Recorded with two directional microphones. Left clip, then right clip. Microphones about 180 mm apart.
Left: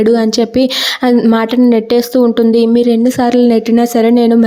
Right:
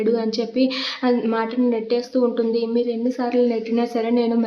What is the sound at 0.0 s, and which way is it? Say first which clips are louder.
A woman's voice: left 10 dB; 50° left (ahead or behind).